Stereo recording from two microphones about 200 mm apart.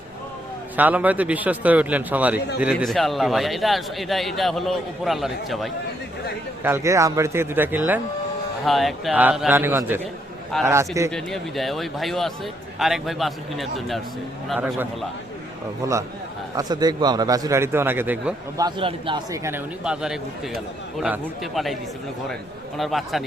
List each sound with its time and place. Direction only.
0.8 s a man's voice: 10° right (ahead or behind)
6.6 s speech: 10° right (ahead or behind)
8.6 s a man's voice: centre (ahead or behind)
11.1 s a man's voice: centre (ahead or behind)
15.8 s speech: 15° right (ahead or behind)
19.5 s a man's voice: 5° right (ahead or behind)
22.8 s a man's voice: centre (ahead or behind)